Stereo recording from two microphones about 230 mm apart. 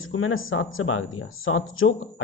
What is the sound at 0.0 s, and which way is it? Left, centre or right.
A man's voice, left.